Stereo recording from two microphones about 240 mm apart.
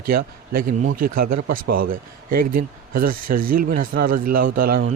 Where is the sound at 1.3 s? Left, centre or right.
Right.